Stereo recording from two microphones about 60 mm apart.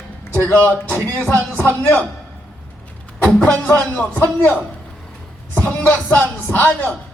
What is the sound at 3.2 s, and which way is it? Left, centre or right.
Speech, centre.